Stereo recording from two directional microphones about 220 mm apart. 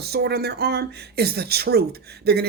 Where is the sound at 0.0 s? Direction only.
50° right (ahead or behind).